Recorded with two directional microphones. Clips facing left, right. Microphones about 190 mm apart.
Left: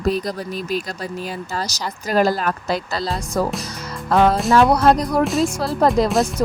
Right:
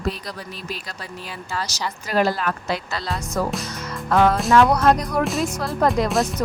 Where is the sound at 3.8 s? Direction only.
35° left (ahead or behind).